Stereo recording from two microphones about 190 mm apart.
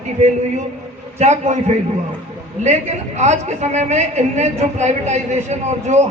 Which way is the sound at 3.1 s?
35° right (ahead or behind).